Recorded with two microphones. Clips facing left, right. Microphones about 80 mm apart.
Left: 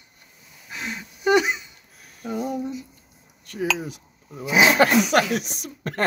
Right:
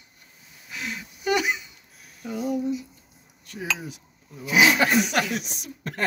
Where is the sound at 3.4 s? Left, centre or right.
Left.